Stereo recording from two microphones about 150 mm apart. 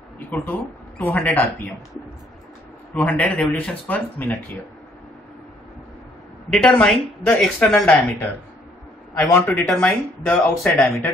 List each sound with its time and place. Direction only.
0.3 s speech: 10° left (ahead or behind)
2.9 s speech: 10° left (ahead or behind)
6.5 s speech: 5° left (ahead or behind)